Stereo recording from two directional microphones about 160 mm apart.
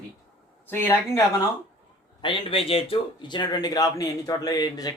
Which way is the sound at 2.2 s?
35° left (ahead or behind).